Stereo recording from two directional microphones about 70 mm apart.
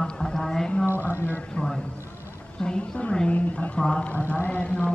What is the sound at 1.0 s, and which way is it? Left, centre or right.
Speech, left.